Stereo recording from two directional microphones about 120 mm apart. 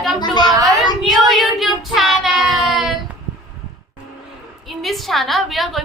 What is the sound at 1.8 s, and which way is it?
Child singing, centre (ahead or behind).